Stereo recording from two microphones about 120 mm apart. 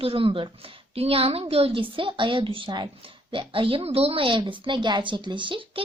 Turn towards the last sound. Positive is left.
turn(degrees=-45)  # may be behind; listen again after turning